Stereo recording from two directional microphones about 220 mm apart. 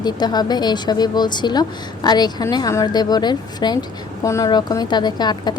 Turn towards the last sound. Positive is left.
turn(degrees=20)  # may be behind; listen again after turning